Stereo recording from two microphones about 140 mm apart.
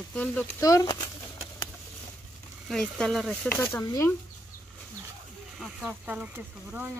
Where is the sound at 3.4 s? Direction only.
15° left (ahead or behind).